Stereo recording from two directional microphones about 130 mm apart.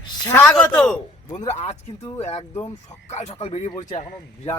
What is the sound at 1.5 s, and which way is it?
Speech, 55° left (ahead or behind).